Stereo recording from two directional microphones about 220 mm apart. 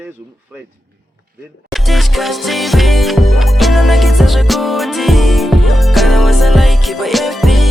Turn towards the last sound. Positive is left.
turn(degrees=0)  # may be behind; listen again after turning